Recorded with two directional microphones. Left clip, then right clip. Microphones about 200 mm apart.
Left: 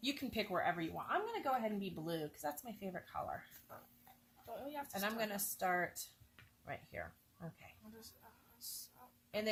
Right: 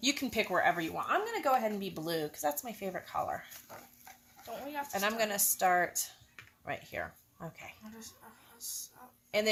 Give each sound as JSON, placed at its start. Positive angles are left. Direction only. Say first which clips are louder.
{"t": 0.0, "sound": "speech", "louder": "right 9 dB", "side_deg": -30}
{"t": 4.4, "sound": "speech", "louder": "right 7 dB", "side_deg": 30}
{"t": 4.9, "sound": "speech", "louder": "right 9 dB", "side_deg": -30}